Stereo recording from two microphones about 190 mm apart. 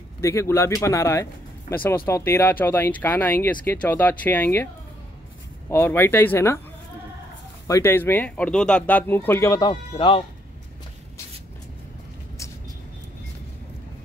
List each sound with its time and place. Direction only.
0.2 s speech: 15° left (ahead or behind)
5.7 s speech: 10° left (ahead or behind)
7.6 s speech: 15° left (ahead or behind)